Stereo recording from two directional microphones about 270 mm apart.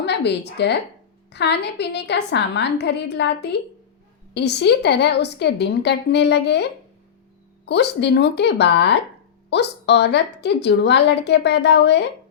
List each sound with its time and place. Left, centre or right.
0.0 s a woman's voice: left